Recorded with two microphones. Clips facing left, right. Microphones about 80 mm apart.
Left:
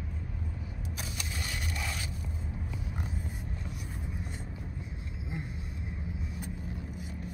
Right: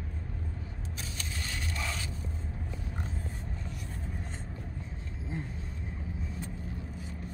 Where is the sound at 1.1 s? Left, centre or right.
Right.